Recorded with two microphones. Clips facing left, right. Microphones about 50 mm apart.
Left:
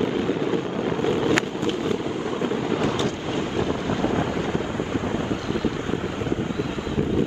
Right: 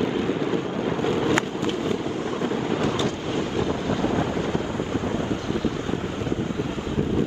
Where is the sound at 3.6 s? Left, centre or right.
Left.